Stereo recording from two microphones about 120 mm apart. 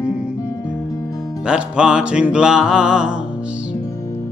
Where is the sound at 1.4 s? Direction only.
10° right (ahead or behind).